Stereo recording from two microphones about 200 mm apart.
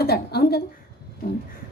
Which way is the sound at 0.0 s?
50° left (ahead or behind).